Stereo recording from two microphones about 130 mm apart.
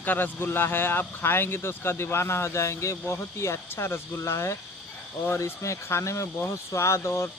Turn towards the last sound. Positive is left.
turn(degrees=20)  # may be behind; listen again after turning